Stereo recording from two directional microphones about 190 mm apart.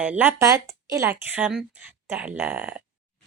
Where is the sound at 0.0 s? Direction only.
5° right (ahead or behind).